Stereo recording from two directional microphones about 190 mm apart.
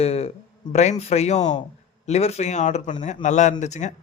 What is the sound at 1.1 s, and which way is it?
A man's voice, 35° left (ahead or behind).